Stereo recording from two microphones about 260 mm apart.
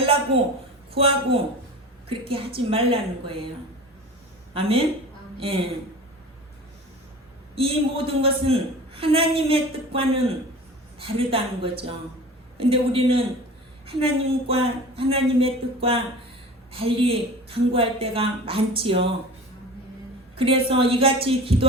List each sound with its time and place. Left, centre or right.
0.0 s a sound: right
0.9 s a man's voice: right
5.4 s a man's voice: right
7.5 s a man's voice: right
20.3 s a man's voice: right